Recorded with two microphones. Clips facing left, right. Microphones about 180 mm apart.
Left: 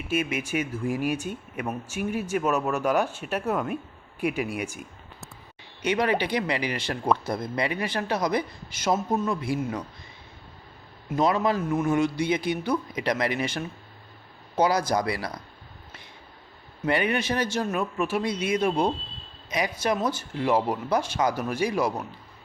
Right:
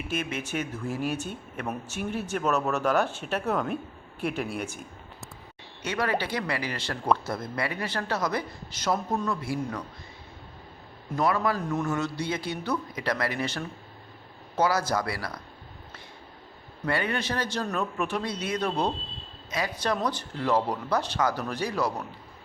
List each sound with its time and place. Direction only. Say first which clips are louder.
0.1 s speech: left 5 dB; 10° left (ahead or behind)
11.1 s a man's voice: left 3 dB; 20° left (ahead or behind)
11.6 s a man's voice: left 5 dB; 5° left (ahead or behind)
16.8 s speech: left 4 dB; 15° left (ahead or behind)